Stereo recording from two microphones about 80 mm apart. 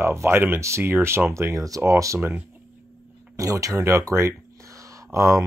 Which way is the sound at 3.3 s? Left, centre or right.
Right.